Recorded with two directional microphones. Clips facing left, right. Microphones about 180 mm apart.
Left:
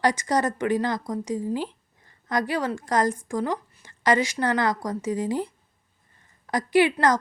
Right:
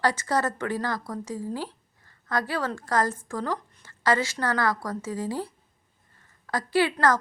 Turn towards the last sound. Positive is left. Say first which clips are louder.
# left 3 dB
turn(degrees=15)  # may be behind; listen again after turning